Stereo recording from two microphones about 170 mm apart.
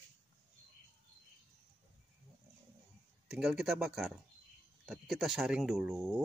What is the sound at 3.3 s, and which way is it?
Speech, centre (ahead or behind).